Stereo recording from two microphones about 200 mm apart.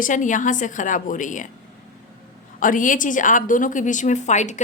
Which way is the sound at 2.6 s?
40° left (ahead or behind).